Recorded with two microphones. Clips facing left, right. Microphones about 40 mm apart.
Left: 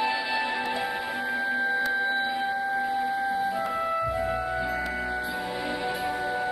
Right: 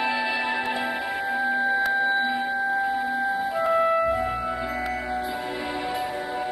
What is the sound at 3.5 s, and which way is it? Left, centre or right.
Music, right.